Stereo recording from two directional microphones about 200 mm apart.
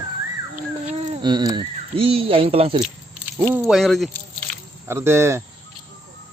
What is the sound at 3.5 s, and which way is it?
Speech, centre (ahead or behind).